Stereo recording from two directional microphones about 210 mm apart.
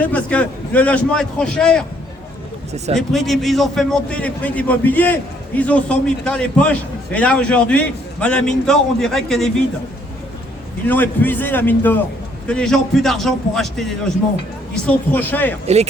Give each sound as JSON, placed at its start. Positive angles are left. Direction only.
{"t": 0.0, "sound": "a man's voice", "side_deg": 5}
{"t": 2.7, "sound": "speech", "side_deg": -30}
{"t": 3.1, "sound": "a man's voice", "side_deg": 0}
{"t": 10.8, "sound": "a man's voice", "side_deg": 10}
{"t": 15.6, "sound": "speech", "side_deg": -30}